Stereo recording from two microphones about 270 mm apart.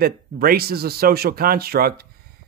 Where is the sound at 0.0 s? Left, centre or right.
Right.